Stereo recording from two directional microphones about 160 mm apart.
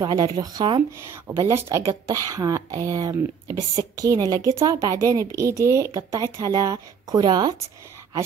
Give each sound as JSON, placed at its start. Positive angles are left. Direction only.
{"t": 0.0, "sound": "speech", "side_deg": -20}